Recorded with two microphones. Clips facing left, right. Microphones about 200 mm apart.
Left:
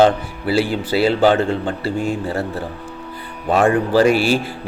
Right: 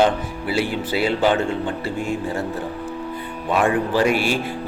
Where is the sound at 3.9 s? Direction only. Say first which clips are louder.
Left 5 dB; 35° left (ahead or behind).